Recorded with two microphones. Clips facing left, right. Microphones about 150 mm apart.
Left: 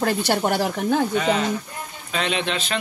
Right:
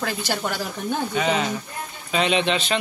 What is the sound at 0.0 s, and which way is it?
Speech, 55° left (ahead or behind).